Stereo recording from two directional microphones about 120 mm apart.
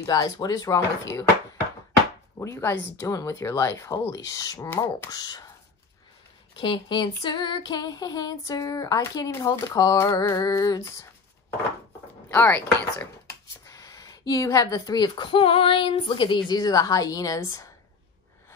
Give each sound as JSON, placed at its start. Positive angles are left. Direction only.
{"t": 0.0, "sound": "female singing", "side_deg": 30}
{"t": 2.3, "sound": "female singing", "side_deg": 20}
{"t": 5.1, "sound": "speech", "side_deg": 30}
{"t": 6.5, "sound": "female singing", "side_deg": 40}
{"t": 12.3, "sound": "speech", "side_deg": 15}